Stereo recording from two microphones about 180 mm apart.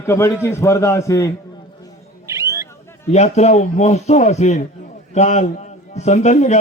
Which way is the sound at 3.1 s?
40° left (ahead or behind).